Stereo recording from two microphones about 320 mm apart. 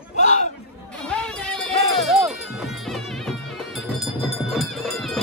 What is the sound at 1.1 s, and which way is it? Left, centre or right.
Music, centre.